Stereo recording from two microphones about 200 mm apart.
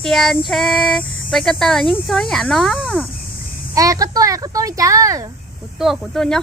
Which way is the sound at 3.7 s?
15° right (ahead or behind).